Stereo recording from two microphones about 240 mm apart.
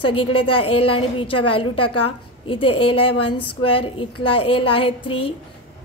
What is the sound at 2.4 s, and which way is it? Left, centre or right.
A woman's voice, left.